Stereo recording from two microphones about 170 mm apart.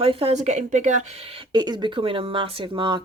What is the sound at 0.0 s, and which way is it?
Speech, 35° right (ahead or behind).